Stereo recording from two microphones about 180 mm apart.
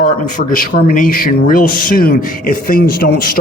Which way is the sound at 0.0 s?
50° left (ahead or behind).